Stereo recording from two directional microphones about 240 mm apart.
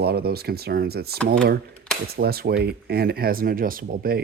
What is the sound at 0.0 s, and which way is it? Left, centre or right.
Speech, right.